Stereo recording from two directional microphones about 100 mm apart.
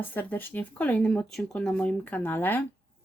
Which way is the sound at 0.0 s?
20° left (ahead or behind).